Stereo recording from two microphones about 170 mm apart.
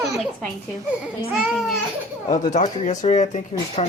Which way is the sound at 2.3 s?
45° left (ahead or behind).